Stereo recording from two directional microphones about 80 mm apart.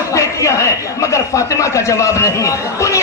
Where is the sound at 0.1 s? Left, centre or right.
Left.